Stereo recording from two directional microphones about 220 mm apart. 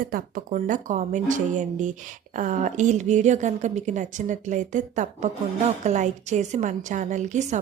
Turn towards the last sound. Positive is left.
turn(degrees=-35)  # may be behind; listen again after turning